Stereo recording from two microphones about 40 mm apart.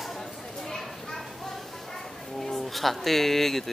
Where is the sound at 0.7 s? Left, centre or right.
Centre.